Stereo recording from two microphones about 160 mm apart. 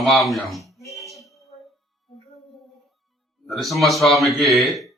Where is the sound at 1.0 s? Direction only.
Centre (ahead or behind).